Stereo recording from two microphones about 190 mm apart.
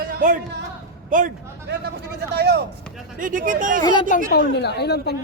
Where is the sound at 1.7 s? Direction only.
65° right (ahead or behind).